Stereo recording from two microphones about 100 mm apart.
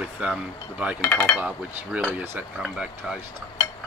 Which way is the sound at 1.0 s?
15° left (ahead or behind).